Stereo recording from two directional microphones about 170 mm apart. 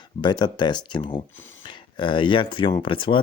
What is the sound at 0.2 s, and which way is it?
Speech, 25° left (ahead or behind).